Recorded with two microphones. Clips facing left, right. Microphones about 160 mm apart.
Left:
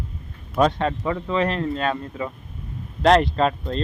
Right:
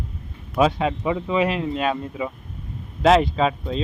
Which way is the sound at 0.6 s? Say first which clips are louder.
Even; 5° right (ahead or behind).